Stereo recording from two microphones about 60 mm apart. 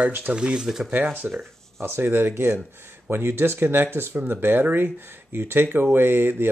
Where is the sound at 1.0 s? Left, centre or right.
Right.